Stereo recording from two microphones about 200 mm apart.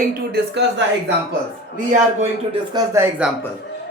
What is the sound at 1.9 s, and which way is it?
Speech, 30° right (ahead or behind).